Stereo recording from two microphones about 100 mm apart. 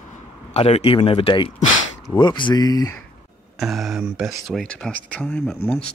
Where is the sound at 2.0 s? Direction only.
50° left (ahead or behind).